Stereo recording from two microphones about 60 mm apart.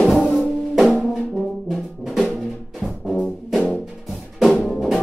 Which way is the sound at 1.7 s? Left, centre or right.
Centre.